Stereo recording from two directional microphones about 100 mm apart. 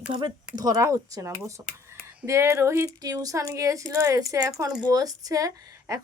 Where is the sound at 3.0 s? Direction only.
35° right (ahead or behind).